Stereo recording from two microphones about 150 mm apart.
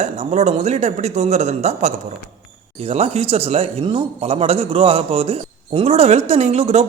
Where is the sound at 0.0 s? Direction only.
45° right (ahead or behind).